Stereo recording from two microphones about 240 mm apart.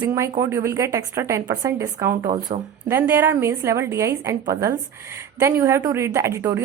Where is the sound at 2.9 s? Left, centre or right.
Centre.